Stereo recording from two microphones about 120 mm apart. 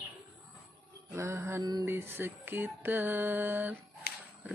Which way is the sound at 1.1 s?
25° right (ahead or behind).